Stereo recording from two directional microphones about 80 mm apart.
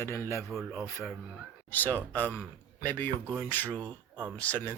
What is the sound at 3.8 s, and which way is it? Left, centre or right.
Speech, right.